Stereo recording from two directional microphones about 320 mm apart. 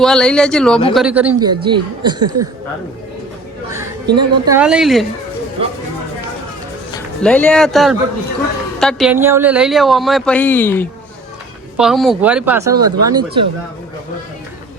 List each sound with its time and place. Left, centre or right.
0.0 s speech: centre
3.7 s a sound: centre
4.1 s speech: centre
5.6 s speech: centre
7.2 s speech: centre